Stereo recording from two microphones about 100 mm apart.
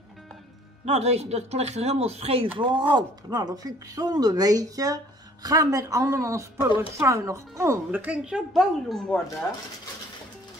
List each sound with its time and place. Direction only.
0.8 s speech: 90° right
2.6 s speech: 50° right (ahead or behind); by 7.8 s 30° right (ahead or behind)
7.9 s a woman's voice: 15° right (ahead or behind); by 9.2 s 5° left (ahead or behind)